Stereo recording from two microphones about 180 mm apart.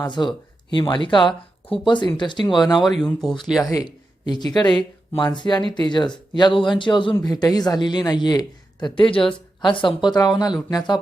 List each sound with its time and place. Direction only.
0.0 s speech: 25° left (ahead or behind)
3.0 s speech: centre (ahead or behind)
3.6 s speech: 20° left (ahead or behind)